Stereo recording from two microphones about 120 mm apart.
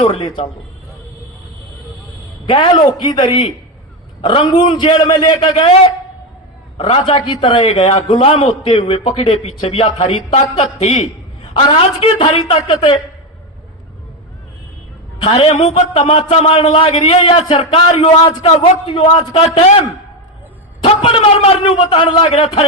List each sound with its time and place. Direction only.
0.0 s a man's voice: 55° left (ahead or behind)
2.5 s a man's voice: 40° left (ahead or behind)
6.7 s a man's voice: 50° left (ahead or behind); by 11.1 s 70° left (ahead or behind)
11.7 s a man's voice: 55° left (ahead or behind)
15.3 s a man's voice: 60° left (ahead or behind)
19.3 s a man's voice: 60° left (ahead or behind)
21.0 s a man's voice: 50° left (ahead or behind)